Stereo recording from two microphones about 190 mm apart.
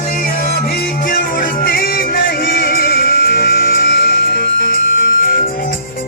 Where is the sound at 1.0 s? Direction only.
50° left (ahead or behind).